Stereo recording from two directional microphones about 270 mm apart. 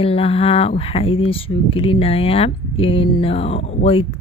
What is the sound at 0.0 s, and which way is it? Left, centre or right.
Speech, left.